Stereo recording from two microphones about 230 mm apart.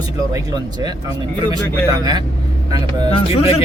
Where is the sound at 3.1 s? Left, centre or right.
Left.